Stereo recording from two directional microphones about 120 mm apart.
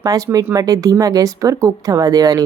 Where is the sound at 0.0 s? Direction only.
30° right (ahead or behind).